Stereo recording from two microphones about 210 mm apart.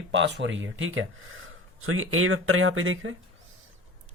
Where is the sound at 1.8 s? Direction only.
85° right.